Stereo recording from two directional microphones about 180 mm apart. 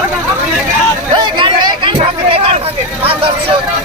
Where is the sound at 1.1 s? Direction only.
25° right (ahead or behind).